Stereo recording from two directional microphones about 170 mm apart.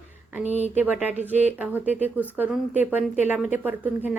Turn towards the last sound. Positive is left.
turn(degrees=-10)  # may be behind; listen again after turning